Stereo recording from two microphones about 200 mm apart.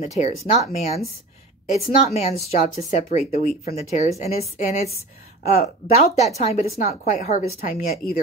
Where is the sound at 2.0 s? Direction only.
35° left (ahead or behind).